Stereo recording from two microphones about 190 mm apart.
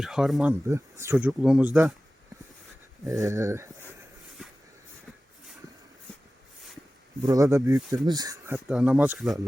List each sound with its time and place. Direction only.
0.0 s speech: centre (ahead or behind)
0.7 s speech: 15° right (ahead or behind)
3.0 s speech: 15° right (ahead or behind)
7.3 s speech: 15° right (ahead or behind); by 9.4 s centre (ahead or behind)